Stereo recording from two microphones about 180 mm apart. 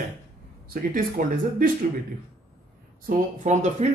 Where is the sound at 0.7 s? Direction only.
50° right (ahead or behind).